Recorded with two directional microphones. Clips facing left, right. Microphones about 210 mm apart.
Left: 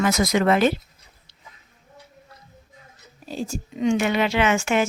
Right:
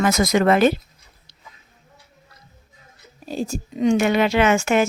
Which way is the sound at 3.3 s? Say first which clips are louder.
Right 3 dB; 40° right (ahead or behind).